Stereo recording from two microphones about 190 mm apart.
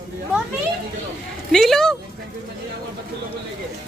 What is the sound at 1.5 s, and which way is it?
Speech, centre (ahead or behind).